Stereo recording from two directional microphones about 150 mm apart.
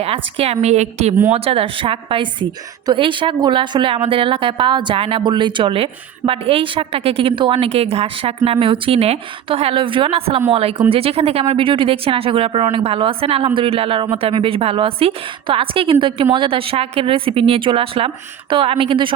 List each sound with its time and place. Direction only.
0.0 s a woman's voice: 40° right (ahead or behind)